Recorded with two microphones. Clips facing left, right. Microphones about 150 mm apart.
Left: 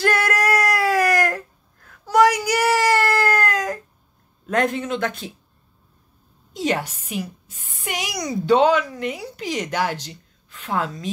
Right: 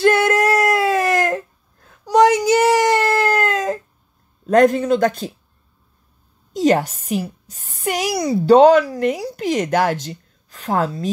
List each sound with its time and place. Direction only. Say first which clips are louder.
0.0 s a sound: right 6 dB; 25° right (ahead or behind)
4.5 s a woman's voice: right 8 dB; 40° right (ahead or behind)
6.5 s a woman's voice: right 8 dB; 45° right (ahead or behind)